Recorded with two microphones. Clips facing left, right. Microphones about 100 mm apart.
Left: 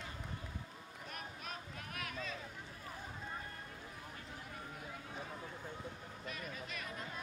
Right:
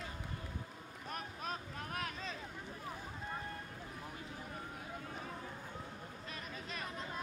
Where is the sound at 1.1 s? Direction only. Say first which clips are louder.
Right 5 dB; 35° right (ahead or behind).